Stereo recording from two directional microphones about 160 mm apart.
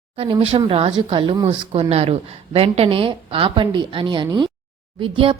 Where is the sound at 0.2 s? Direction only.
35° right (ahead or behind).